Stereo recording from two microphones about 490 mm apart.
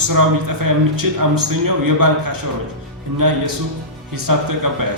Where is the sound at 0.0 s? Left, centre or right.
Right.